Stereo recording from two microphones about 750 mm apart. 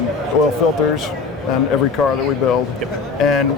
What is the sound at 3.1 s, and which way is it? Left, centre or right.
Speech, left.